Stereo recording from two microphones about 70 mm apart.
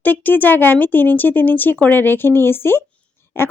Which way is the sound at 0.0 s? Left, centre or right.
Left.